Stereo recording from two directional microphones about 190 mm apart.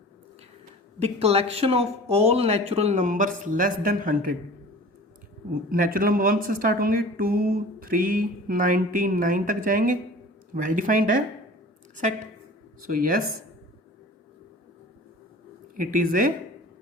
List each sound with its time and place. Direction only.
1.0 s speech: 35° right (ahead or behind)
5.6 s a woman's voice: 50° right (ahead or behind)
15.7 s a woman's voice: 45° right (ahead or behind)